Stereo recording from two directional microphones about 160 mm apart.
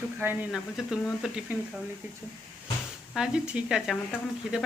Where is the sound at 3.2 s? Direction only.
5° right (ahead or behind).